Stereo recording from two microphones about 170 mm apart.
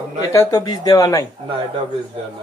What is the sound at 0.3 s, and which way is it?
Speech, 25° left (ahead or behind).